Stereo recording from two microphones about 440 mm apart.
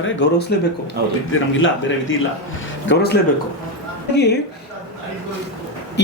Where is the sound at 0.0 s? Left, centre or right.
Left.